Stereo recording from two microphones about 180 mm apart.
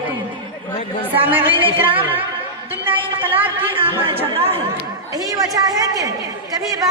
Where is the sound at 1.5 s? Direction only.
30° right (ahead or behind).